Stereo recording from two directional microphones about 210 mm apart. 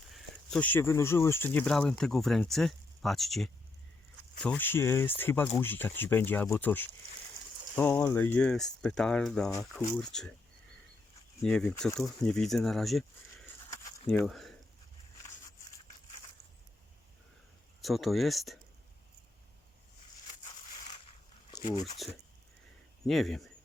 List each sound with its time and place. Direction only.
0.1 s speech: 5° left (ahead or behind)
11.4 s speech: 5° left (ahead or behind)
14.3 s speech: centre (ahead or behind)
17.7 s speech: centre (ahead or behind)
21.5 s a sound: 20° left (ahead or behind)
23.0 s speech: centre (ahead or behind)